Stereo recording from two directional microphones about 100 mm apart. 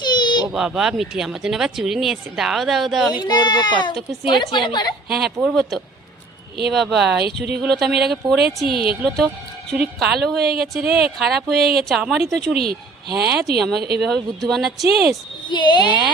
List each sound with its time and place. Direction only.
0.0 s baby cry: 45° left (ahead or behind)
0.5 s speech: 5° right (ahead or behind)
3.2 s speech: 45° left (ahead or behind)
5.0 s speech: 5° right (ahead or behind)
13.6 s speech: centre (ahead or behind)
15.4 s speech: 50° left (ahead or behind)